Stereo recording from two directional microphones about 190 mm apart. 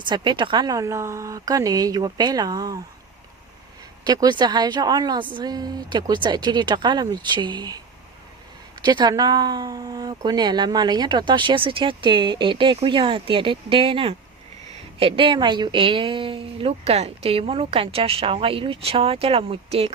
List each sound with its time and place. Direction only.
0.0 s speech: 25° right (ahead or behind)
4.0 s speech: 20° right (ahead or behind)
8.8 s speech: 20° right (ahead or behind)